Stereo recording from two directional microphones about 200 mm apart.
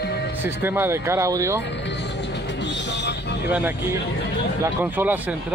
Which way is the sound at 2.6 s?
60° left (ahead or behind).